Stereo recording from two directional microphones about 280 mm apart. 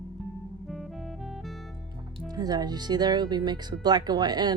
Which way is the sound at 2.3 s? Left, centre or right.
Centre.